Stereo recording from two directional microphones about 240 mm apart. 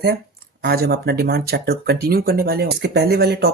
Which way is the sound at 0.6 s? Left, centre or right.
Right.